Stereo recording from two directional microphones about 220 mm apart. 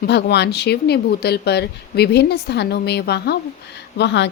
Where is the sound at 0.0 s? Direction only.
50° left (ahead or behind).